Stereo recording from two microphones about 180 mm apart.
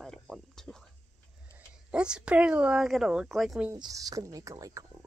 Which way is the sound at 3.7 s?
20° right (ahead or behind).